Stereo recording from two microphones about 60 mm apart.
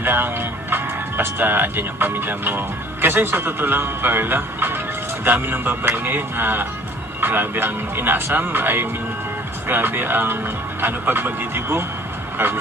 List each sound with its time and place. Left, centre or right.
0.0 s speech: right